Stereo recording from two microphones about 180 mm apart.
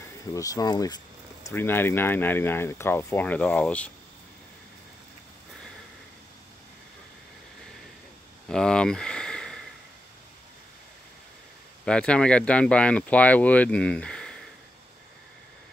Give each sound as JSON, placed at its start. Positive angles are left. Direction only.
{"t": 0.3, "sound": "speech", "side_deg": 20}
{"t": 8.5, "sound": "a sound", "side_deg": 5}
{"t": 11.8, "sound": "speech", "side_deg": 5}